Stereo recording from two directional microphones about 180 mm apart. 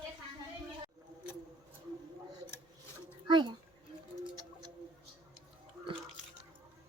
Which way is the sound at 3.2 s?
25° right (ahead or behind).